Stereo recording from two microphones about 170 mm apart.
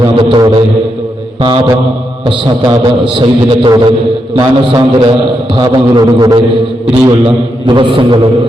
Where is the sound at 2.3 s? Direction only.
30° right (ahead or behind).